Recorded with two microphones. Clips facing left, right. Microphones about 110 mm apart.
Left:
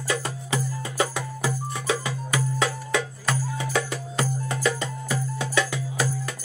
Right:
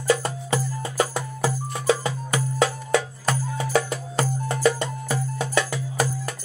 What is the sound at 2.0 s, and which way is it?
Music, 40° right (ahead or behind).